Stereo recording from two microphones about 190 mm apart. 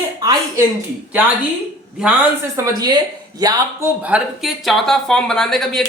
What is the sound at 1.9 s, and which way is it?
Speech, 10° right (ahead or behind).